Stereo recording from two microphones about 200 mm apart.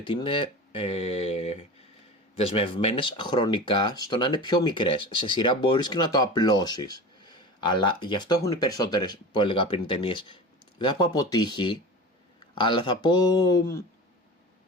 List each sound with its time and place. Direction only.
0.0 s speech: 25° left (ahead or behind)